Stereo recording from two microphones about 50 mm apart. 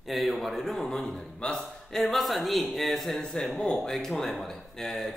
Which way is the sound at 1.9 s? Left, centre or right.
Centre.